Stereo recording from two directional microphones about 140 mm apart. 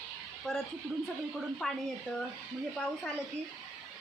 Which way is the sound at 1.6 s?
Centre (ahead or behind).